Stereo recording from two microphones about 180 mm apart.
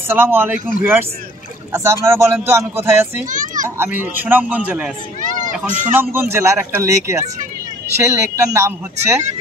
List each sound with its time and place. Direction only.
0.1 s speech: 10° right (ahead or behind)
1.7 s speech: 15° right (ahead or behind)
3.3 s a child's voice: 45° right (ahead or behind)
3.6 s speech: 15° right (ahead or behind)